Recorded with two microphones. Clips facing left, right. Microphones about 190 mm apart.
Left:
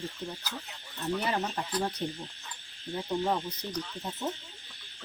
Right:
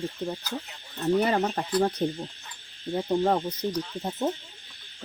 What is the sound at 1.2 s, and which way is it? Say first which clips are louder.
Cricket: right 7 dB; 55° right (ahead or behind).